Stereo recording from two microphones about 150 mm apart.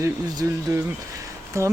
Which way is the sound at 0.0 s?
20° right (ahead or behind).